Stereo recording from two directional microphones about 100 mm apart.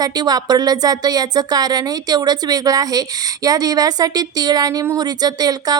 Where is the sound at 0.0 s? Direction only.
40° right (ahead or behind).